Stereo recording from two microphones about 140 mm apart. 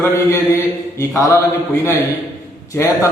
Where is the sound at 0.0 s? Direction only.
20° left (ahead or behind).